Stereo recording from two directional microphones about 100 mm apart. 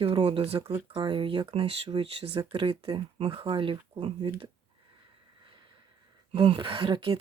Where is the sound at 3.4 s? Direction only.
55° right (ahead or behind); by 4.5 s 70° right (ahead or behind).